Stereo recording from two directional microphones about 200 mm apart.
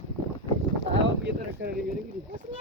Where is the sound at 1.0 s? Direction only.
55° right (ahead or behind).